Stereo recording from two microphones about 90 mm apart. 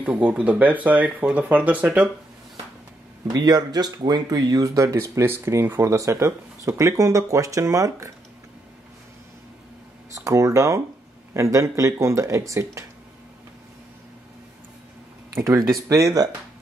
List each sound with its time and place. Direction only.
0.0 s speech: 15° right (ahead or behind)
3.3 s speech: 50° right (ahead or behind)
10.1 s speech: 35° right (ahead or behind)
15.3 s speech: 30° right (ahead or behind)